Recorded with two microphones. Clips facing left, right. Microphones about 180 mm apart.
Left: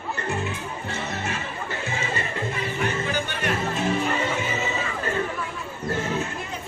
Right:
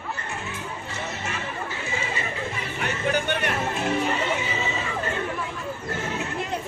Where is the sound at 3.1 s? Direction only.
60° right (ahead or behind).